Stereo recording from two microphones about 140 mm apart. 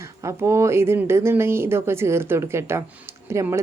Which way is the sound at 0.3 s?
20° right (ahead or behind).